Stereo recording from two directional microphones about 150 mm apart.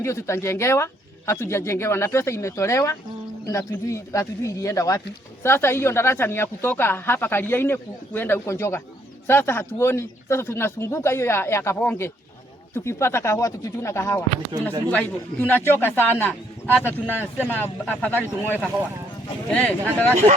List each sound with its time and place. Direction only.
0.0 s speech: 20° left (ahead or behind)
14.5 s speech: 30° right (ahead or behind)
14.8 s speech: 10° left (ahead or behind)